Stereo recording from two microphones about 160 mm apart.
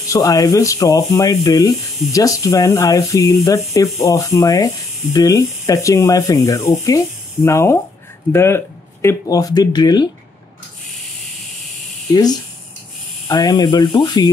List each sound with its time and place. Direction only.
0.0 s speech: 20° left (ahead or behind)
12.1 s speech: 25° left (ahead or behind)